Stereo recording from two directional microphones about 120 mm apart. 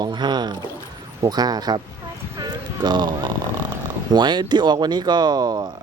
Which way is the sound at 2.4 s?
40° right (ahead or behind).